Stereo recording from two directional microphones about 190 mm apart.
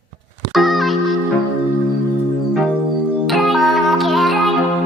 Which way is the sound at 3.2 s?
Centre (ahead or behind).